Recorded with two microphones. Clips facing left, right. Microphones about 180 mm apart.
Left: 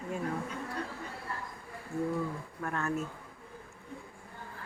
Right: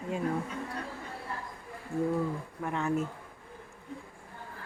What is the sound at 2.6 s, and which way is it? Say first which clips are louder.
Speech: right 3 dB; 15° right (ahead or behind).